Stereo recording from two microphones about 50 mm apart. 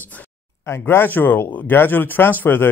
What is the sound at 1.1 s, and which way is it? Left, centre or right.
Speech, left.